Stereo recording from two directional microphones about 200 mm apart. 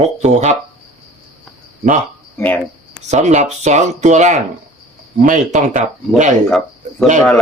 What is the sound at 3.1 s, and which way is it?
Speech, 35° right (ahead or behind).